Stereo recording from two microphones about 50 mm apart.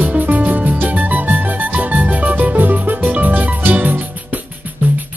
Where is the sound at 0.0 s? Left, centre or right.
Right.